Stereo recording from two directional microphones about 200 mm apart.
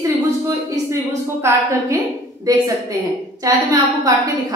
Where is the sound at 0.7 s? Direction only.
15° right (ahead or behind).